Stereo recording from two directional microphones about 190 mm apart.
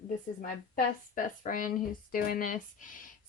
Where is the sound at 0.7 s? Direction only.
45° left (ahead or behind).